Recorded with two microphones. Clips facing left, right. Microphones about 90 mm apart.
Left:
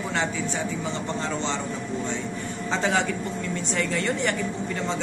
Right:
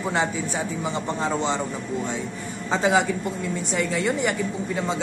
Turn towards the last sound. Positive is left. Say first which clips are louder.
# right 2 dB
turn(degrees=-10)  # may be behind; listen again after turning